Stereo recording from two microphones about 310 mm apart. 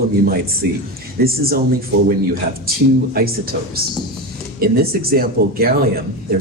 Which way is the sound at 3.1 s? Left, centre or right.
Right.